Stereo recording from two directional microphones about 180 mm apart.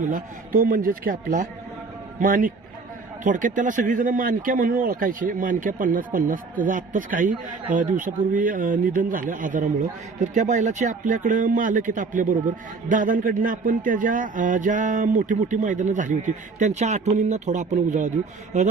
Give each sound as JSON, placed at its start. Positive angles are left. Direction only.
{"t": 0.0, "sound": "speech", "side_deg": -50}